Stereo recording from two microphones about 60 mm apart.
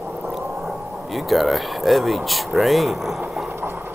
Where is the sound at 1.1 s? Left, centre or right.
Centre.